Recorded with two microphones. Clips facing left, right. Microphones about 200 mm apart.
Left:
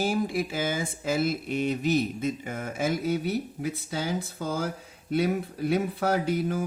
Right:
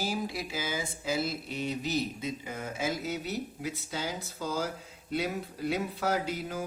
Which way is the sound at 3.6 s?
55° left (ahead or behind).